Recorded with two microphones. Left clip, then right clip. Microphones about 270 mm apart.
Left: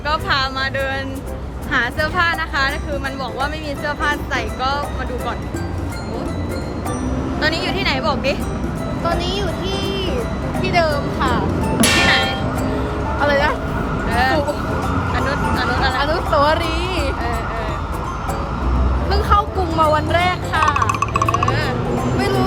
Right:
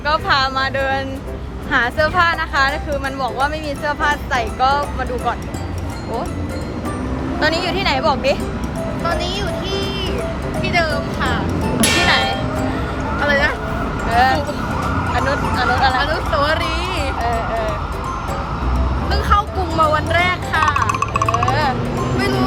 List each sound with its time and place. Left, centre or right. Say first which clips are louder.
0.1 s a woman's voice: right 3 dB; centre
7.4 s a woman's voice: right 2 dB; centre
9.0 s speech: left 1 dB; centre
11.8 s music: even; centre
13.2 s speech: even; centre
14.1 s a woman's voice: right 2 dB; centre
16.0 s speech: left 1 dB; centre
19.1 s speech: even; centre
20.7 s music: even; centre
22.2 s speech: even; centre